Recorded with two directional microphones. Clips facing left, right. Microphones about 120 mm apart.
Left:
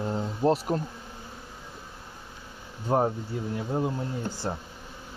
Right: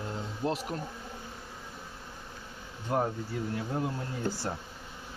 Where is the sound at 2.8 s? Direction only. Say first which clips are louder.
Left 5 dB; 30° left (ahead or behind).